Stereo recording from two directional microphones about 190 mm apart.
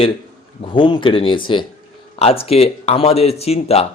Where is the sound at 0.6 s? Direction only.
25° left (ahead or behind).